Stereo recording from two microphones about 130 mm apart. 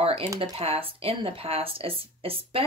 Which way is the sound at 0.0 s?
50° right (ahead or behind).